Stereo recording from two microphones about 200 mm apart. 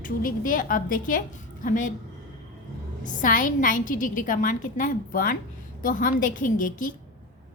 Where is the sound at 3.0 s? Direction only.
40° left (ahead or behind).